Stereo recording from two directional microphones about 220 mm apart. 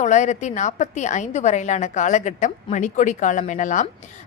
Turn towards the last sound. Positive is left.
turn(degrees=35)  # may be behind; listen again after turning